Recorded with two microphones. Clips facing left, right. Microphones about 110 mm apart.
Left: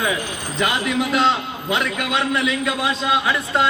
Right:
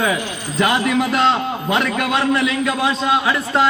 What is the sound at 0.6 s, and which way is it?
A man's voice, 45° right (ahead or behind).